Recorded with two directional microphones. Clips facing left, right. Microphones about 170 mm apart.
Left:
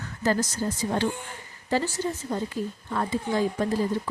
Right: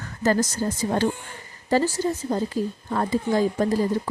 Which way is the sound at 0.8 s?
45° right (ahead or behind).